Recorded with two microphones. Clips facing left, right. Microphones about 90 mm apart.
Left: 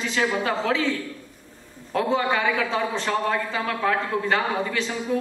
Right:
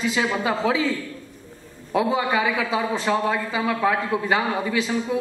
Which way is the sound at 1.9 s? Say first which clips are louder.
Right 1 dB; 5° right (ahead or behind).